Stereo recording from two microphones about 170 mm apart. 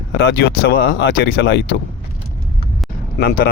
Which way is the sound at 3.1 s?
60° left (ahead or behind).